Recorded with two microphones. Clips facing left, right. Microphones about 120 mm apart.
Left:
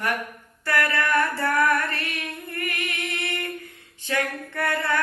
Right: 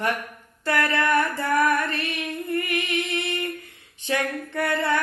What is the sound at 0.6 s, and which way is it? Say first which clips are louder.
Female singing: right 1 dB; 20° right (ahead or behind).